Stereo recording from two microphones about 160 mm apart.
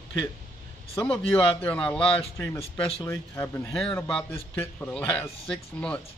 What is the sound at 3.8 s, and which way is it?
Speech, 5° left (ahead or behind).